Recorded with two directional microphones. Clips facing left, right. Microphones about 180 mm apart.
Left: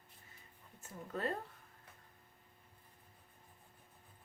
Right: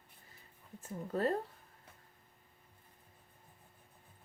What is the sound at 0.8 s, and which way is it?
Speech, 35° right (ahead or behind).